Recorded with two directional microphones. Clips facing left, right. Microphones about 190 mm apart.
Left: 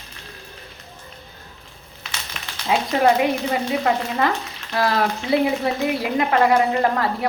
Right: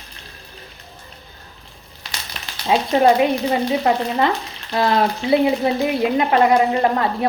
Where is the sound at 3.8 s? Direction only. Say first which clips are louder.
Right 3 dB; 30° right (ahead or behind).